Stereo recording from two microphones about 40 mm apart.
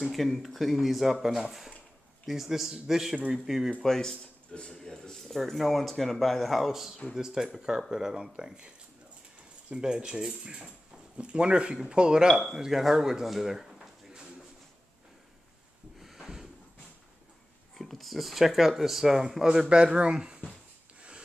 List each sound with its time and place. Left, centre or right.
0.1 s a man's voice: centre
3.8 s speech: centre
5.3 s a man's voice: centre
16.0 s a sound: centre
17.7 s speech: centre
19.4 s speech: centre